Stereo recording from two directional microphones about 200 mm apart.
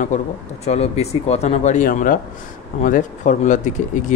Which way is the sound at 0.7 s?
30° left (ahead or behind).